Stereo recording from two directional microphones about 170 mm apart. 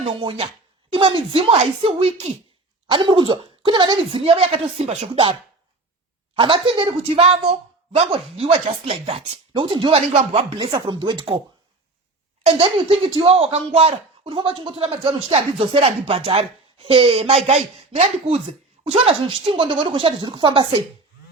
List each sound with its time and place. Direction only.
0.0 s a woman's voice: 30° right (ahead or behind)
6.3 s speech: 30° right (ahead or behind)
12.5 s speech: 30° right (ahead or behind)